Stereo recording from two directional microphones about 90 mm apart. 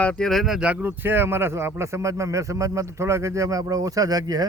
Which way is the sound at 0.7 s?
20° right (ahead or behind).